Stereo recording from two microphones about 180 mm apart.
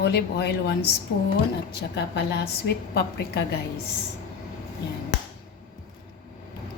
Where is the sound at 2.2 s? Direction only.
65° left (ahead or behind).